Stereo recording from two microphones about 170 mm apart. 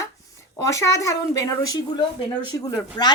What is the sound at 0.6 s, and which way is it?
A woman's voice, 20° left (ahead or behind).